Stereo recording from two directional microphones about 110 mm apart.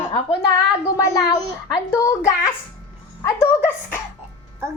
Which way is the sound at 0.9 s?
25° left (ahead or behind).